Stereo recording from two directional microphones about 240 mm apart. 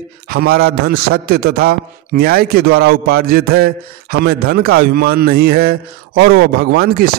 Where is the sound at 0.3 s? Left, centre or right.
Right.